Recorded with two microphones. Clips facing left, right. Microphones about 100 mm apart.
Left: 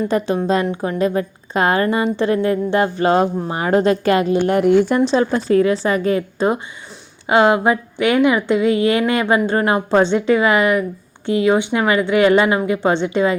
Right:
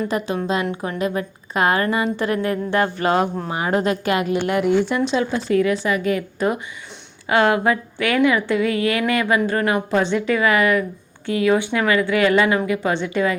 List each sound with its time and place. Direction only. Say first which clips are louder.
0.4 s a woman's voice: left 4 dB; 35° left (ahead or behind)